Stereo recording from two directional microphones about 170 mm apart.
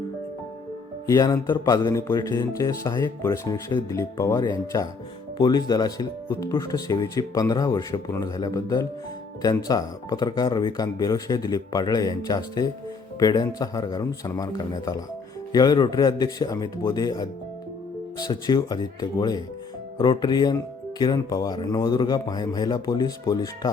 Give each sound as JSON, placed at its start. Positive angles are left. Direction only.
{"t": 1.0, "sound": "speech", "side_deg": 20}